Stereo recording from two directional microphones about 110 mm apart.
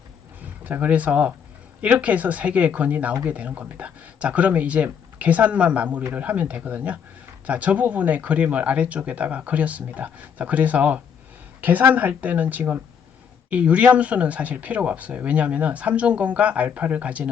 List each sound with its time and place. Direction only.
0.6 s speech: 15° right (ahead or behind)